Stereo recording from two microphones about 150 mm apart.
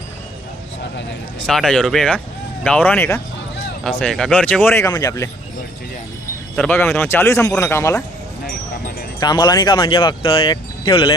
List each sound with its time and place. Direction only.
1.5 s speech: 5° left (ahead or behind)
3.8 s a man's voice: 5° left (ahead or behind); by 5.3 s 20° left (ahead or behind)
6.6 s speech: 15° left (ahead or behind)
9.2 s speech: 30° left (ahead or behind)